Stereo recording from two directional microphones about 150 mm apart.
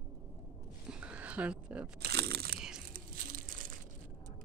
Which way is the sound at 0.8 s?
5° right (ahead or behind).